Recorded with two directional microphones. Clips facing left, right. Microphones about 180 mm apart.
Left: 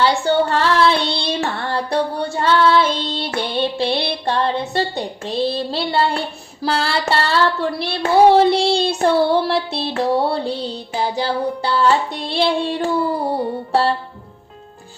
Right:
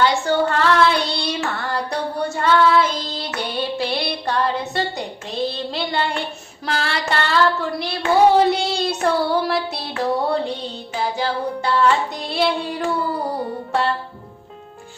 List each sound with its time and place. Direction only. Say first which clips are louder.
0.0 s child singing: left 2 dB; 30° left (ahead or behind)
9.9 s music: left 2 dB; 30° left (ahead or behind)